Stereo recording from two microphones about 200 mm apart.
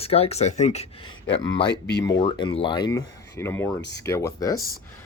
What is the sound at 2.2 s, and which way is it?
Speech, 25° left (ahead or behind).